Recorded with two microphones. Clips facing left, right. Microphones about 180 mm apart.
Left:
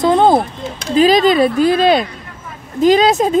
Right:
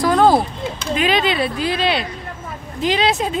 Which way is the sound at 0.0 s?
25° left (ahead or behind).